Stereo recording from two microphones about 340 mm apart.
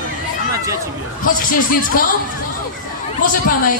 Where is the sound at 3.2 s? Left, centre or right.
Left.